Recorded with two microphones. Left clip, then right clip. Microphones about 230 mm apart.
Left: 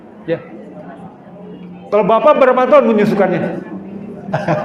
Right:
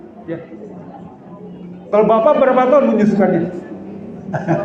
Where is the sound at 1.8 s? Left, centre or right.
Left.